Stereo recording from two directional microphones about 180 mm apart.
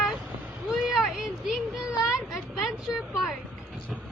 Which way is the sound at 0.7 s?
Centre (ahead or behind).